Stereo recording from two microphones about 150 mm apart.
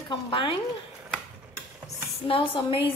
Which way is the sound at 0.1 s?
35° left (ahead or behind).